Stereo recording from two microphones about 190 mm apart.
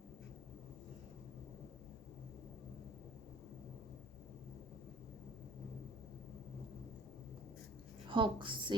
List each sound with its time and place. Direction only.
8.1 s a woman's voice: 25° right (ahead or behind)